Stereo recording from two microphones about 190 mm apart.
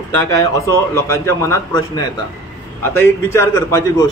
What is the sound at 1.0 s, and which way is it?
A man's voice, 15° left (ahead or behind).